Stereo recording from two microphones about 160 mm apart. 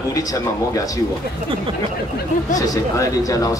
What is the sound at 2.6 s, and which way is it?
Speech, 20° left (ahead or behind).